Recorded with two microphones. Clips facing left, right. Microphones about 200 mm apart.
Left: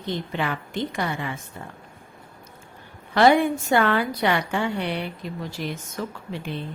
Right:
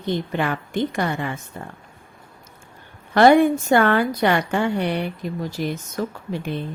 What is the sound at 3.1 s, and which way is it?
Speech, 50° right (ahead or behind).